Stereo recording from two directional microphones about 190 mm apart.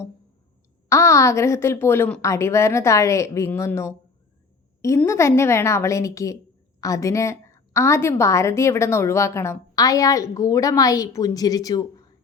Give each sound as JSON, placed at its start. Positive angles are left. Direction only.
{"t": 0.9, "sound": "a woman's voice", "side_deg": 15}